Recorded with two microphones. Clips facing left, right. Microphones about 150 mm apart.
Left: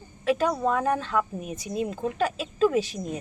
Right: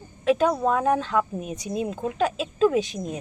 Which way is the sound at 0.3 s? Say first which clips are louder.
Right 3 dB; centre (ahead or behind).